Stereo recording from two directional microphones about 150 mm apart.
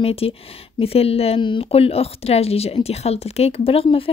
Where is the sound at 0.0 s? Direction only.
40° left (ahead or behind).